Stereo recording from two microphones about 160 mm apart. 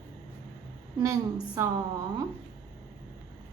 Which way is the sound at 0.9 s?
20° right (ahead or behind).